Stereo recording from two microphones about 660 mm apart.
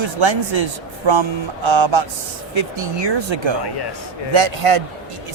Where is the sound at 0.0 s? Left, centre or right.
Right.